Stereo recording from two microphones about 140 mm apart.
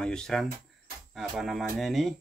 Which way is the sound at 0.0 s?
5° left (ahead or behind).